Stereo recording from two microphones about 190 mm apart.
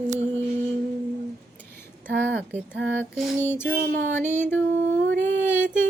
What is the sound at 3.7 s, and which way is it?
Music, 55° right (ahead or behind).